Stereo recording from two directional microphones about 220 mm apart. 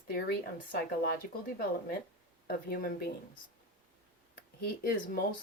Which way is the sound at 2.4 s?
45° left (ahead or behind).